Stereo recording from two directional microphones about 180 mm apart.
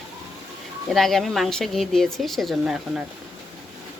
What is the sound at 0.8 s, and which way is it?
Speech, centre (ahead or behind).